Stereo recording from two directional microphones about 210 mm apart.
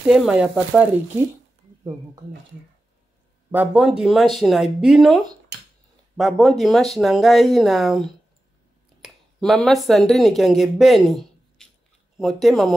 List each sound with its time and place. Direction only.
0.0 s speech: centre (ahead or behind)
3.5 s speech: 5° right (ahead or behind)
9.0 s speech: centre (ahead or behind)